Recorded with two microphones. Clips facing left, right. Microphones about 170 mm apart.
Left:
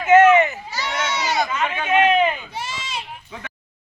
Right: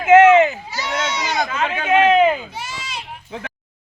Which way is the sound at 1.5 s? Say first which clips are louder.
Right 2 dB; 90° right.